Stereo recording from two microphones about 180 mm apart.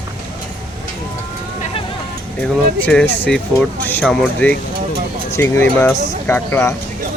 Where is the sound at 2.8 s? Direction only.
10° left (ahead or behind).